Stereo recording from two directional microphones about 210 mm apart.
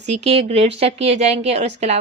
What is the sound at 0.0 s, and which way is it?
Speech, 30° right (ahead or behind).